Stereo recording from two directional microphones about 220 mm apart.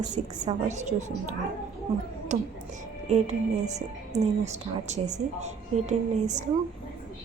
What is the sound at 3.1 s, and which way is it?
A woman's voice, 30° right (ahead or behind).